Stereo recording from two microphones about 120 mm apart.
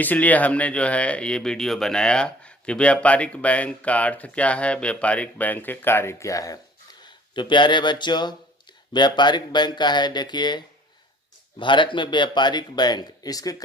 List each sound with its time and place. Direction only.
0.0 s speech: 15° left (ahead or behind); by 6.6 s 30° left (ahead or behind)
7.0 s speech: 40° left (ahead or behind)
11.6 s speech: 40° left (ahead or behind)